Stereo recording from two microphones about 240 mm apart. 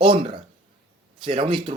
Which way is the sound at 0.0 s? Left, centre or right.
Right.